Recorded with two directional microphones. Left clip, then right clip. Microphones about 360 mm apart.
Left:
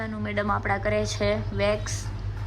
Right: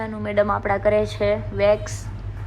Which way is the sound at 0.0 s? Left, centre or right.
Centre.